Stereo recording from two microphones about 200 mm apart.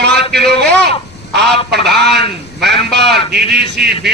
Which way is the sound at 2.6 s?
55° right (ahead or behind).